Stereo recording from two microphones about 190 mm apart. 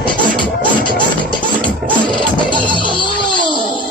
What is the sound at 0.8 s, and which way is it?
Music, 25° left (ahead or behind).